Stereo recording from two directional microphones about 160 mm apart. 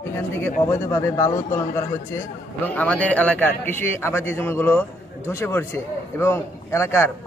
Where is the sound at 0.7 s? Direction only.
20° left (ahead or behind).